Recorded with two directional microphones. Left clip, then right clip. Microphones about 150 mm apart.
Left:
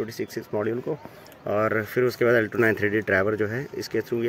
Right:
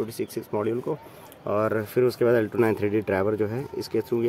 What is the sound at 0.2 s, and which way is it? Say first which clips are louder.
Speech: even; centre (ahead or behind).